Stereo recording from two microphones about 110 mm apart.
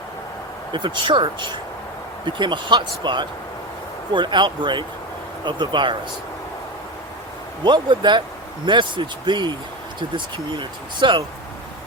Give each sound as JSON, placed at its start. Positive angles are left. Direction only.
{"t": 0.7, "sound": "speech", "side_deg": -45}
{"t": 7.6, "sound": "speech", "side_deg": -45}